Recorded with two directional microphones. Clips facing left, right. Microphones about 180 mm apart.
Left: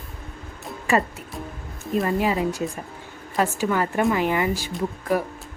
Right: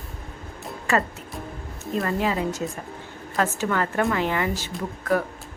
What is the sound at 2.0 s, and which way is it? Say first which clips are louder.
A woman's voice: left 2 dB; 15° left (ahead or behind).